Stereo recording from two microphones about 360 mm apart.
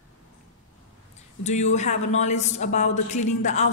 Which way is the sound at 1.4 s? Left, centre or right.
Centre.